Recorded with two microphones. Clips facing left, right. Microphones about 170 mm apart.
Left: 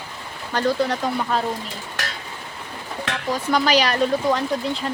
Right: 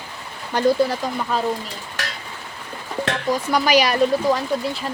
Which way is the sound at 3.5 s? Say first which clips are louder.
Right 1 dB; 10° right (ahead or behind).